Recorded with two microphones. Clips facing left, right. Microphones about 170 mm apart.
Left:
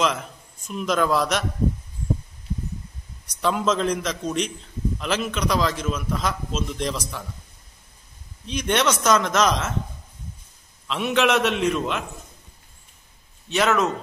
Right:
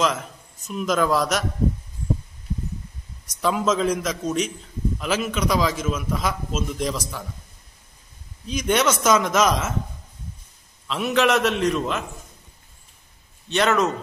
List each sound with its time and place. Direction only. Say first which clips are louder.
0.0 s a man's voice: right 1 dB; centre (ahead or behind)
3.3 s a man's voice: right 1 dB; centre (ahead or behind)
8.5 s a man's voice: right 1 dB; 5° right (ahead or behind)
10.9 s a man's voice: right 1 dB; centre (ahead or behind)
13.5 s a man's voice: right 1 dB; centre (ahead or behind)